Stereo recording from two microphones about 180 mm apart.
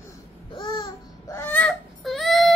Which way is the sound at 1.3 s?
10° left (ahead or behind).